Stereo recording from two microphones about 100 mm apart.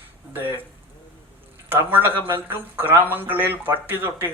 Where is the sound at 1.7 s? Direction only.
20° right (ahead or behind).